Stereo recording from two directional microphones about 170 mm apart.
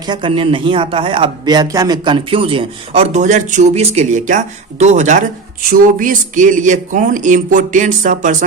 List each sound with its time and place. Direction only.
0.1 s a man's voice: 30° right (ahead or behind); by 8.4 s 50° right (ahead or behind)